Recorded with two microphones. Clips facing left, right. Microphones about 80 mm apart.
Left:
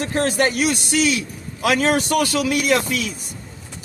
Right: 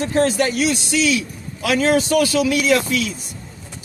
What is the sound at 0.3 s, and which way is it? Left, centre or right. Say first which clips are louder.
A man's voice: even; left.